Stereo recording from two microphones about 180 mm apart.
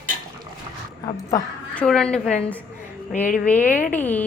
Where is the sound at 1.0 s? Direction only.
20° left (ahead or behind).